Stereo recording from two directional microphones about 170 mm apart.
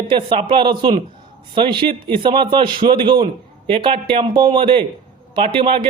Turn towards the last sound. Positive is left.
turn(degrees=-30)  # may be behind; listen again after turning